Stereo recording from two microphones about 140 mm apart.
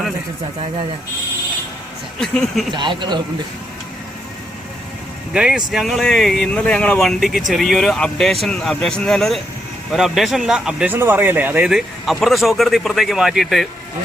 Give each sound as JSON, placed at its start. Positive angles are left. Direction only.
{"t": 2.2, "sound": "speech", "side_deg": 0}
{"t": 2.7, "sound": "a man's voice", "side_deg": -35}
{"t": 5.3, "sound": "speech", "side_deg": -5}
{"t": 10.9, "sound": "speech", "side_deg": -15}